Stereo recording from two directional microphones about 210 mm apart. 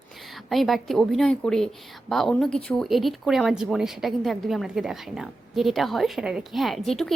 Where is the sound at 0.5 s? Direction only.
Centre (ahead or behind).